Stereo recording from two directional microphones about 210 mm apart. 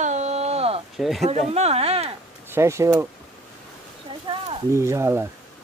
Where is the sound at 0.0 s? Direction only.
35° right (ahead or behind).